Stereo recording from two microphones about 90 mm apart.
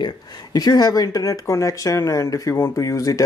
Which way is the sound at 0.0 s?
50° left (ahead or behind).